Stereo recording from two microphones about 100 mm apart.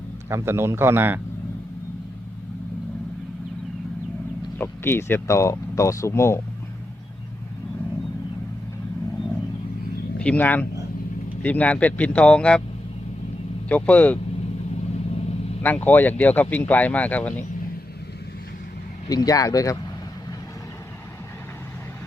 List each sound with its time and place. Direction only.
0.3 s speech: 25° right (ahead or behind)
4.5 s speech: 20° left (ahead or behind)
10.2 s speech: 15° left (ahead or behind)
13.7 s speech: 15° left (ahead or behind)
14.9 s vehicle: 90° left
15.6 s speech: 15° left (ahead or behind)
19.0 s speech: 40° left (ahead or behind)